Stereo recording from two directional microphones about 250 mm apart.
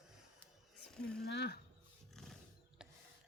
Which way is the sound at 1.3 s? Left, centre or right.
Left.